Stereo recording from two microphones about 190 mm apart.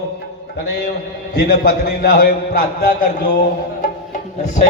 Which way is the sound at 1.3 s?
55° left (ahead or behind).